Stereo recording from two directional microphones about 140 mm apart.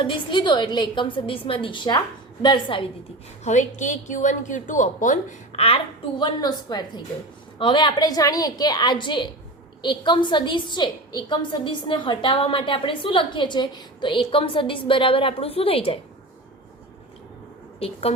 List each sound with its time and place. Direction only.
0.0 s a woman's voice: 35° left (ahead or behind)
3.4 s a woman's voice: 60° left (ahead or behind)
6.1 s a woman's voice: 30° left (ahead or behind)
17.7 s speech: 45° left (ahead or behind)